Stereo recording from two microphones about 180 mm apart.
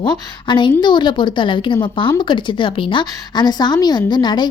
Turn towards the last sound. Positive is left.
turn(degrees=25)  # may be behind; listen again after turning